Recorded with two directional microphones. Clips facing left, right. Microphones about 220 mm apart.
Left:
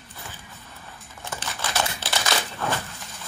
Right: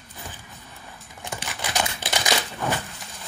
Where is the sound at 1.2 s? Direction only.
15° right (ahead or behind).